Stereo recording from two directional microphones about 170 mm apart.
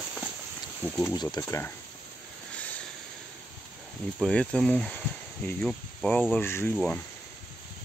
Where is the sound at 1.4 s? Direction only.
15° left (ahead or behind).